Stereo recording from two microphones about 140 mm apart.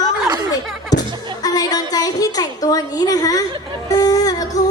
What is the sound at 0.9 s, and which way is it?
Music, 30° left (ahead or behind).